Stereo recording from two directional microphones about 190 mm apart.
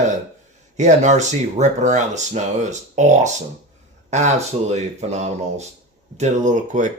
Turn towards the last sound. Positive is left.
turn(degrees=-40)  # may be behind; listen again after turning